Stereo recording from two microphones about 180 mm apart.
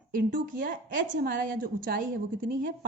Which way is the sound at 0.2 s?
50° right (ahead or behind).